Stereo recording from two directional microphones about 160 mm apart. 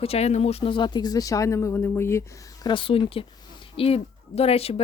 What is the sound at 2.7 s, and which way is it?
Speech, 35° left (ahead or behind).